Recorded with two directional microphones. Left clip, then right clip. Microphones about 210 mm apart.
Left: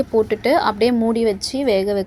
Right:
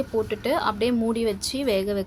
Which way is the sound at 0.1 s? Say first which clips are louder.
Left 9 dB; 20° left (ahead or behind).